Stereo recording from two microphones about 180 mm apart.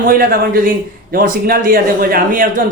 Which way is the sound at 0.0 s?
55° right (ahead or behind).